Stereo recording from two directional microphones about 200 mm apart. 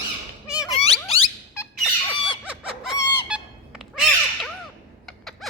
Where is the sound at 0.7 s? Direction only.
30° left (ahead or behind).